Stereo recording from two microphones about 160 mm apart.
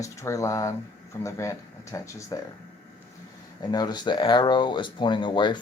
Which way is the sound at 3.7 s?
25° left (ahead or behind).